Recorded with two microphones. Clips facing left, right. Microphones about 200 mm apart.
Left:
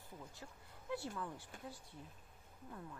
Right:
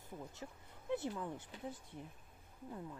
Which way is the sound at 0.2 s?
20° right (ahead or behind).